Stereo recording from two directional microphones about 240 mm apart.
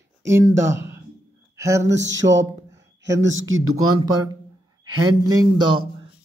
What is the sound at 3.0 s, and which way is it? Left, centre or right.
Speech, right.